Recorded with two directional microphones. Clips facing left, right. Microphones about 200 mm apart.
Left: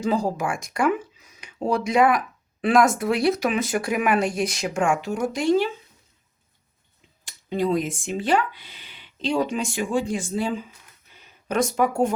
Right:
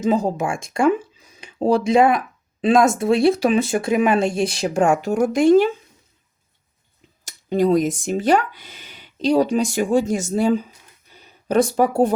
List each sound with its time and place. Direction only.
0.0 s speech: 20° right (ahead or behind); by 5.7 s 50° right (ahead or behind)
7.3 s speech: 45° right (ahead or behind)